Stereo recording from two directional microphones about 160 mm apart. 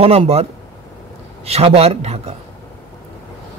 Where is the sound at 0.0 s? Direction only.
40° right (ahead or behind).